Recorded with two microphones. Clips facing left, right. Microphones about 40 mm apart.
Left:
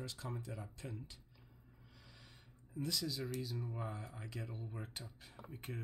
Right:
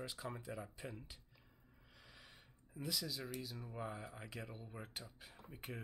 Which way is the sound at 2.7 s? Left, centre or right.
Centre.